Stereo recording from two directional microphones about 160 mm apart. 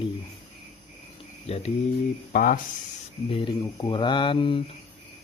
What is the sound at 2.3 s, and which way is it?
Speech, 60° left (ahead or behind).